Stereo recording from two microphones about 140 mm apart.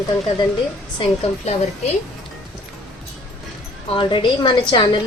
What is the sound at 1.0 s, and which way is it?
Speech, 45° left (ahead or behind).